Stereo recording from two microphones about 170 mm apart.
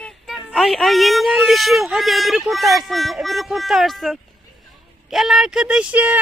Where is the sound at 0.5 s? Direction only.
Centre (ahead or behind).